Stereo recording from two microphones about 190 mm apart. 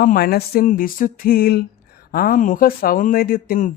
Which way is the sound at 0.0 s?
50° left (ahead or behind).